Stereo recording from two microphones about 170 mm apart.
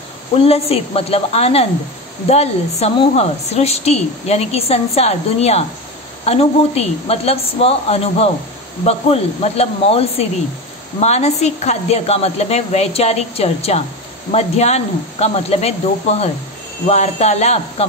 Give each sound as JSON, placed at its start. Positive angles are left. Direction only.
{"t": 0.5, "sound": "a woman's voice", "side_deg": 35}